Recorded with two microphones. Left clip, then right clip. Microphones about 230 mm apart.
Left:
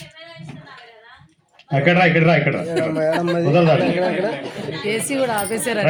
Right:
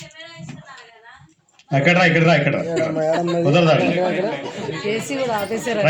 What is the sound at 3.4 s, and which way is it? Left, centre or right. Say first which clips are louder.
Speech: even; right.